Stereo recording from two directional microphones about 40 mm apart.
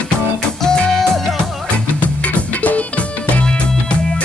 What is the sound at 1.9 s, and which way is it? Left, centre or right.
Music, left.